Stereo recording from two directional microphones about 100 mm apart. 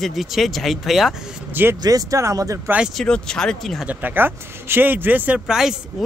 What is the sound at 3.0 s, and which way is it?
Speech, 5° left (ahead or behind).